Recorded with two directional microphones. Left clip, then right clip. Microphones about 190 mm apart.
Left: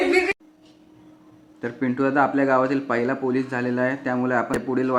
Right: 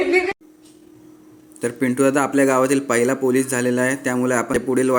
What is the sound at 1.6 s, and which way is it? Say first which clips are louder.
A man's voice: right 5 dB; 20° right (ahead or behind).